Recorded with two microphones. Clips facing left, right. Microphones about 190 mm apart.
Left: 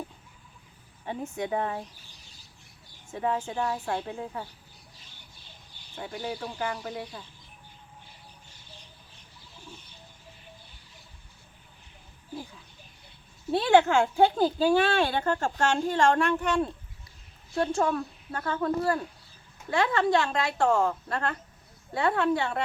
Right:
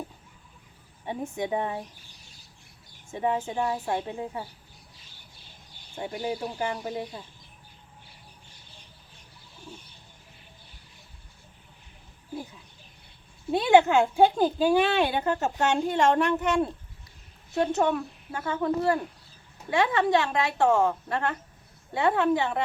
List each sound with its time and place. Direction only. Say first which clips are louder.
1.0 s speech: right 2 dB; 15° right (ahead or behind)
3.1 s speech: right 2 dB; 20° right (ahead or behind)
6.0 s speech: right 4 dB; 20° right (ahead or behind)
13.5 s speech: right 2 dB; 15° right (ahead or behind)
17.9 s speech: even; 10° right (ahead or behind)